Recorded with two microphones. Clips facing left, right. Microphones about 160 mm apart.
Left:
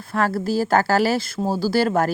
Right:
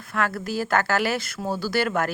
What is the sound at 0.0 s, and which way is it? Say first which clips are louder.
A woman's voice: left 5 dB; 35° left (ahead or behind).